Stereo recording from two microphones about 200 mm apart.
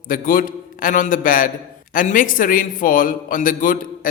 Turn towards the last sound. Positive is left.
turn(degrees=45)  # may be behind; listen again after turning